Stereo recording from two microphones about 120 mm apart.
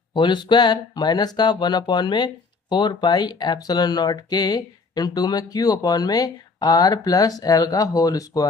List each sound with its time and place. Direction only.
0.1 s speech: 40° left (ahead or behind)